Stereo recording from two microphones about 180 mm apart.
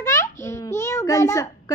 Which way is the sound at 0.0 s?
15° left (ahead or behind).